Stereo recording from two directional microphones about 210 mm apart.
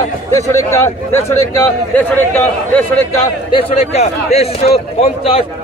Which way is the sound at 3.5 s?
25° left (ahead or behind).